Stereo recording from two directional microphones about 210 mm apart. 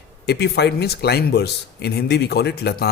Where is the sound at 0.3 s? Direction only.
50° left (ahead or behind).